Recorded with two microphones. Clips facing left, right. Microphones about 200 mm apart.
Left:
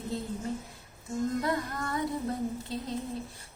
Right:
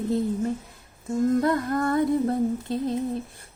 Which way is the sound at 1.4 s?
50° right (ahead or behind).